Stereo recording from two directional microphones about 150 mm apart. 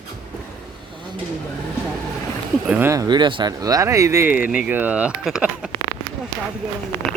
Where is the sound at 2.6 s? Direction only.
10° right (ahead or behind).